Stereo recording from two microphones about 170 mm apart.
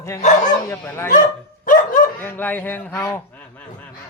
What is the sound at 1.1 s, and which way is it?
Dog, 50° left (ahead or behind).